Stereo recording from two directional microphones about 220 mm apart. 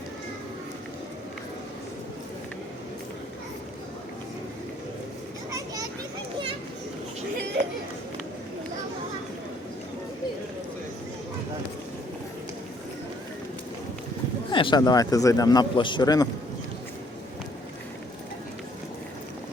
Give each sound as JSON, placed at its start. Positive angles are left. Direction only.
{"t": 5.5, "sound": "children playing", "side_deg": -15}
{"t": 14.5, "sound": "a man's voice", "side_deg": 20}